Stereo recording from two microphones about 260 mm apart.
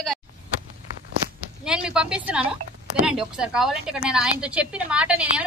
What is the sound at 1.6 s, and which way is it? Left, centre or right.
A woman's voice, centre.